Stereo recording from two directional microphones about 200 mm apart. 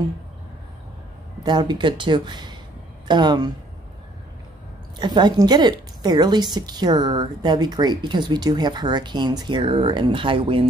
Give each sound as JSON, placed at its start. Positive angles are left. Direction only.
{"t": 1.4, "sound": "a woman's voice", "side_deg": -20}
{"t": 4.9, "sound": "a woman's voice", "side_deg": -20}